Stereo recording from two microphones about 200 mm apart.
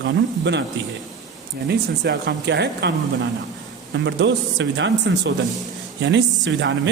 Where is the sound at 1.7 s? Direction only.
60° right (ahead or behind).